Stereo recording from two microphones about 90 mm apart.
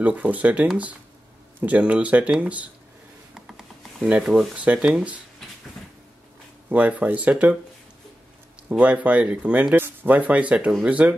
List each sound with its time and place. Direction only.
0.0 s speech: 15° right (ahead or behind)
3.3 s a sound: 5° right (ahead or behind)
4.1 s speech: 10° right (ahead or behind)
6.7 s speech: 15° right (ahead or behind)
8.6 s speech: 15° right (ahead or behind)